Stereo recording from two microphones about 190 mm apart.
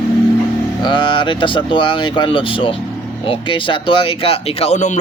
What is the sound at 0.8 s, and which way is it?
Speech, 25° left (ahead or behind).